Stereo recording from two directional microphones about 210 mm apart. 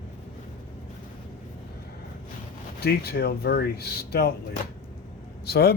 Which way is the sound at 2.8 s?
50° left (ahead or behind).